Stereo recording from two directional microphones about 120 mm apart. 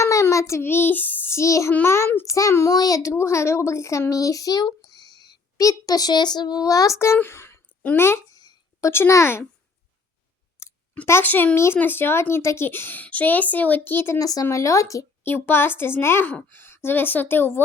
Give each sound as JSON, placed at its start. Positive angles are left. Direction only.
{"t": 0.0, "sound": "child singing", "side_deg": 25}
{"t": 1.7, "sound": "a child's voice", "side_deg": 20}
{"t": 8.4, "sound": "a sound", "side_deg": 35}
{"t": 8.9, "sound": "speech", "side_deg": 20}
{"t": 10.6, "sound": "a sound", "side_deg": 25}
{"t": 10.9, "sound": "speech", "side_deg": 20}
{"t": 14.2, "sound": "speech", "side_deg": 30}